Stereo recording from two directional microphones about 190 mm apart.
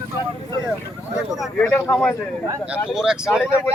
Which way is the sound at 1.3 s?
Centre (ahead or behind).